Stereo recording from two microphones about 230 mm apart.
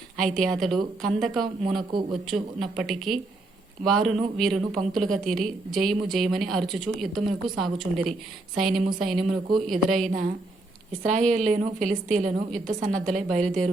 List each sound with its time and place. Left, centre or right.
0.2 s a woman's voice: centre
11.1 s a woman's voice: right